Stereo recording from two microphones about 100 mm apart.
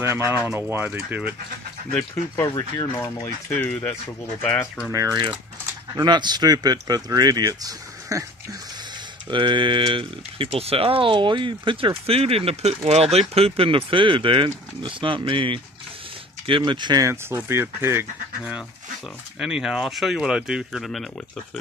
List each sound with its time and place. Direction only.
0.0 s speech: 25° right (ahead or behind)
0.8 s speech: 15° right (ahead or behind)
2.3 s speech: 35° left (ahead or behind)
3.5 s speech: 20° left (ahead or behind)
5.9 s speech: 45° right (ahead or behind)
9.3 s speech: 55° right (ahead or behind)
12.1 s speech: 80° right; by 17.0 s 50° right (ahead or behind)
17.0 s speech: 30° right (ahead or behind)
19.4 s speech: 5° right (ahead or behind)